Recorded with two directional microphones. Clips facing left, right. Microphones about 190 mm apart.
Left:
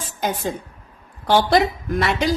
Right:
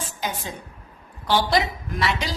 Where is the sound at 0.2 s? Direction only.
50° left (ahead or behind).